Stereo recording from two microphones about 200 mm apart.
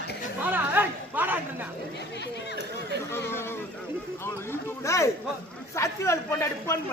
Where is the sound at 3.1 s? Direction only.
10° left (ahead or behind).